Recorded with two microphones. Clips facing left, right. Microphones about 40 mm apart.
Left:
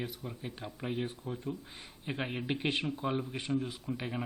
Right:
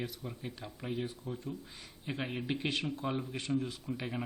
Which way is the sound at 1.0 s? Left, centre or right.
Left.